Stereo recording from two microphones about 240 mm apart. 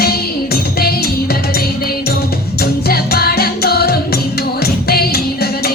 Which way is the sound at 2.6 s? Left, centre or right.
Left.